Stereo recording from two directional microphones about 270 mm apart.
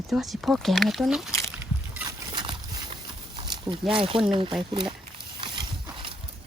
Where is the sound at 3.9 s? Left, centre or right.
Centre.